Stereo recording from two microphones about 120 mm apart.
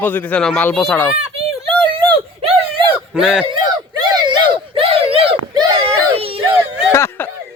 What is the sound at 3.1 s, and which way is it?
Speech, 5° right (ahead or behind).